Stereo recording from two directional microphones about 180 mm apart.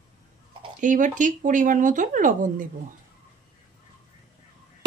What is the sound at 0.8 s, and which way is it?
Speech, 45° right (ahead or behind).